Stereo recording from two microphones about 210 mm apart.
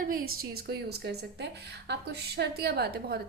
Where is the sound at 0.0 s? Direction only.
45° right (ahead or behind).